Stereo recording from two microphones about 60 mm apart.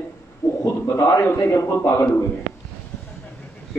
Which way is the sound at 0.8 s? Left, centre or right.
Left.